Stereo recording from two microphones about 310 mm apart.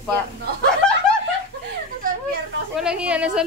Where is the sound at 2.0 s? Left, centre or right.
Right.